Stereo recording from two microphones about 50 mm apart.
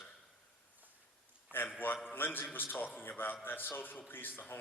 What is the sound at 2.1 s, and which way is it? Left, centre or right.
A man's voice, left.